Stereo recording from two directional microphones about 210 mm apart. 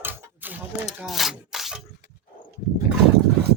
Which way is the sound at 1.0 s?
Centre (ahead or behind).